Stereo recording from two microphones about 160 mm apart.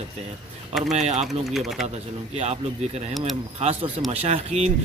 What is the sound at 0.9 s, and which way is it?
Speech, 45° right (ahead or behind).